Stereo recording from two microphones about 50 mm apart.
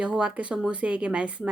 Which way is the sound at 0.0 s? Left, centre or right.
Right.